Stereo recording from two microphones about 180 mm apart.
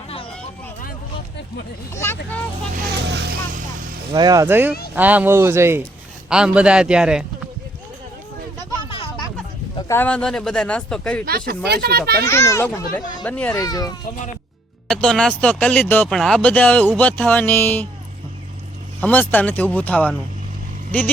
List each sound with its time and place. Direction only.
2.0 s speech: 15° left (ahead or behind)
2.7 s vehicle: 70° right (ahead or behind)
4.1 s a man's voice: 20° right (ahead or behind); by 7.3 s 5° right (ahead or behind)
8.9 s a sound: 25° left (ahead or behind)
9.9 s a man's voice: 10° left (ahead or behind)
11.3 s speech: 60° right (ahead or behind)
12.2 s speech: 15° left (ahead or behind)
13.6 s a child's voice: 20° left (ahead or behind)
14.8 s speech: 5° left (ahead or behind)
18.9 s speech: 10° left (ahead or behind)